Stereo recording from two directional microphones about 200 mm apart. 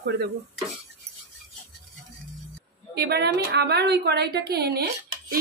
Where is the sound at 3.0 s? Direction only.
55° right (ahead or behind).